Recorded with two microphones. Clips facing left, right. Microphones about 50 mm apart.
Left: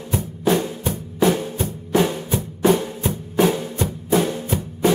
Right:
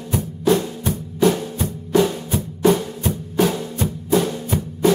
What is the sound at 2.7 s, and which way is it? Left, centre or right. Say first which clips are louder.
Drum: even; centre.